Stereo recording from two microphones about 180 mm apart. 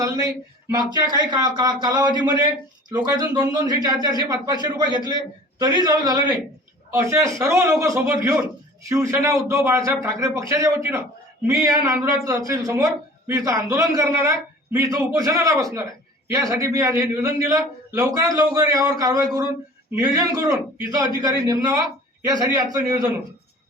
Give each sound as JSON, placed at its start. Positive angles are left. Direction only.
{"t": 0.7, "sound": "a man's voice", "side_deg": -20}